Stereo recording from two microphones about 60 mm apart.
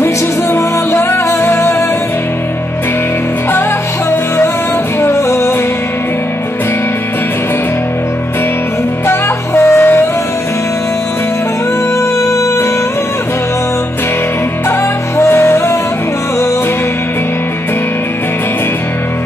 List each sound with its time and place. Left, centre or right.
0.0 s music: left
5.0 s music: left
9.0 s music: left
12.2 s music: left
15.1 s music: left